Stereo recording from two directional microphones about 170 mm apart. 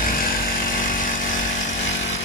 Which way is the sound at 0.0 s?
55° left (ahead or behind).